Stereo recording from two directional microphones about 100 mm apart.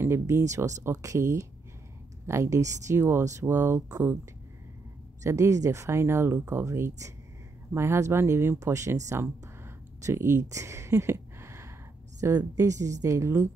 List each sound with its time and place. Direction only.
0.0 s speech: 25° right (ahead or behind)
5.2 s speech: 30° right (ahead or behind)